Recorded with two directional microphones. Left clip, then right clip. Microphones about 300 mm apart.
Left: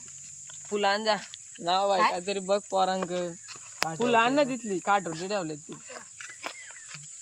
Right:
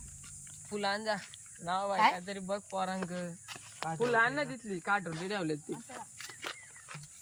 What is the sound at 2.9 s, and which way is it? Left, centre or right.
Speech, left.